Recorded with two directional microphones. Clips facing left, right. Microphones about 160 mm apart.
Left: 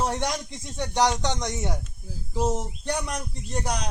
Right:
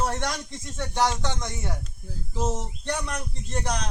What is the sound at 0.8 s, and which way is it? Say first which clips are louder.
Speech: left 2 dB; 20° left (ahead or behind).